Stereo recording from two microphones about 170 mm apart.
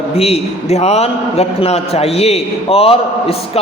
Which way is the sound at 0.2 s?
40° left (ahead or behind).